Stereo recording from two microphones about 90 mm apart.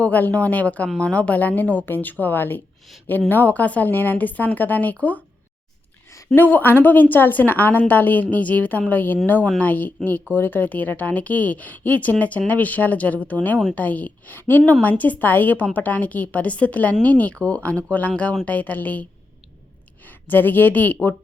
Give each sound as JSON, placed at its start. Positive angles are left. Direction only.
{"t": 0.0, "sound": "a woman's voice", "side_deg": 15}
{"t": 6.3, "sound": "a woman's voice", "side_deg": 20}
{"t": 20.1, "sound": "speech", "side_deg": 20}